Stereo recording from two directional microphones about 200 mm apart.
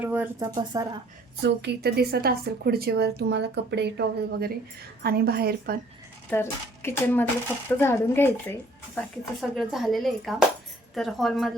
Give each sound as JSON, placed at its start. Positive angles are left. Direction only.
{"t": 0.0, "sound": "speech", "side_deg": -10}
{"t": 0.4, "sound": "speech", "side_deg": -20}
{"t": 1.4, "sound": "speech", "side_deg": -55}
{"t": 6.3, "sound": "speech", "side_deg": 10}
{"t": 9.0, "sound": "speech", "side_deg": 0}